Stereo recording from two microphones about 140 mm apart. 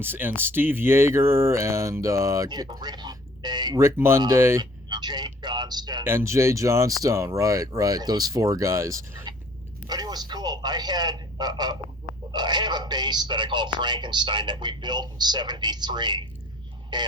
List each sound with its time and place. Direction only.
0.0 s speech: 15° right (ahead or behind); by 3.8 s 30° right (ahead or behind)
3.8 s a man's voice: 20° right (ahead or behind)
6.1 s speech: 20° right (ahead or behind)